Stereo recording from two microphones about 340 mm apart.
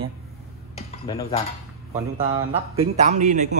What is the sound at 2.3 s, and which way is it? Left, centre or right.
A man's voice, centre.